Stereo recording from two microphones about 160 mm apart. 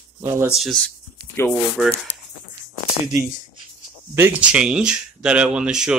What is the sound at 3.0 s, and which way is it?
Speech, centre (ahead or behind).